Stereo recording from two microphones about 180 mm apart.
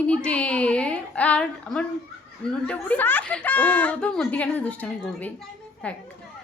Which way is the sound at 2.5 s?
5° left (ahead or behind).